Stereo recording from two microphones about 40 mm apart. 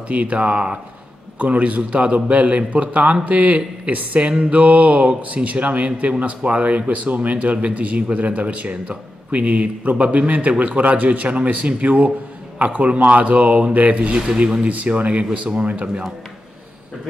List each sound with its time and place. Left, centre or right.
0.1 s speech: right
14.7 s speech: right